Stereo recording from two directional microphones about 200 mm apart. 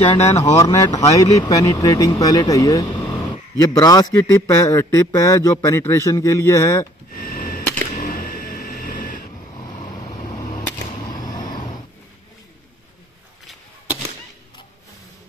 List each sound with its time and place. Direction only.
0.0 s speech: 30° left (ahead or behind)
0.4 s a man's voice: 15° left (ahead or behind)
7.2 s a sound: 45° left (ahead or behind)
11.2 s vehicle: 20° left (ahead or behind)